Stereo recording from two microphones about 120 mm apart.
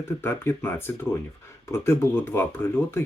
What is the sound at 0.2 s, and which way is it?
Speech, 20° left (ahead or behind).